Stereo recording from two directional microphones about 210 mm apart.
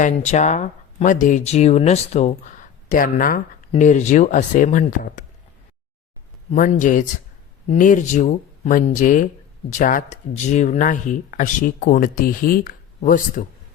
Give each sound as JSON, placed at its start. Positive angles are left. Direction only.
{"t": 0.0, "sound": "speech", "side_deg": 35}
{"t": 6.5, "sound": "speech", "side_deg": 35}